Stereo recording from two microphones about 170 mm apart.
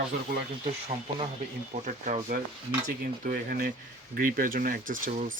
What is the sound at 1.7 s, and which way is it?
Speech, 45° right (ahead or behind).